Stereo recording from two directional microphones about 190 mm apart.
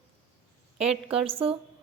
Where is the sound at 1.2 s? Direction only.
30° right (ahead or behind).